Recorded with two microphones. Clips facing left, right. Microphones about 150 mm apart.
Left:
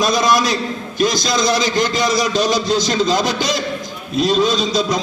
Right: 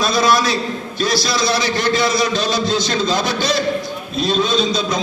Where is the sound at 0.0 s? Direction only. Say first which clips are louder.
Even; 15° left (ahead or behind).